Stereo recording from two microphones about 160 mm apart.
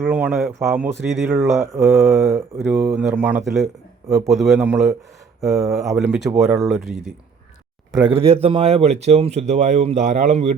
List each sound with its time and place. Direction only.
0.0 s speech: 10° right (ahead or behind)
1.5 s speech: 15° right (ahead or behind); by 6.8 s centre (ahead or behind)
7.9 s speech: 25° right (ahead or behind)
8.2 s speech: 40° right (ahead or behind)